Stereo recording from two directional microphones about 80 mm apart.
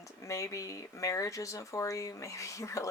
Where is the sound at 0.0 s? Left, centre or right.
Left.